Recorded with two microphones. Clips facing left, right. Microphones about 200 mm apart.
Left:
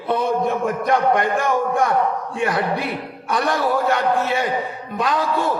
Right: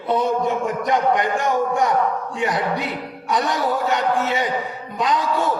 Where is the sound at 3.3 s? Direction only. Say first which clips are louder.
Left 1 dB; 20° right (ahead or behind).